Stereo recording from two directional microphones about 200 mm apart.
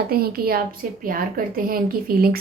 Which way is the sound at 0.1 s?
50° right (ahead or behind).